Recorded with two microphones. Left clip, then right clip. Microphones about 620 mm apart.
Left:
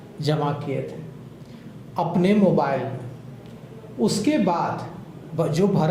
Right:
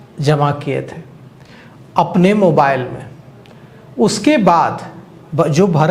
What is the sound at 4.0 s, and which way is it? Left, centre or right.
Speech, right.